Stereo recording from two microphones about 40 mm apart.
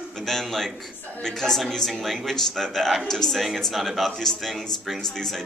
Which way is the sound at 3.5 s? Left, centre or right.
Centre.